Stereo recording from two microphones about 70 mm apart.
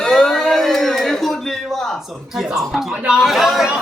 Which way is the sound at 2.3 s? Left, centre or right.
Centre.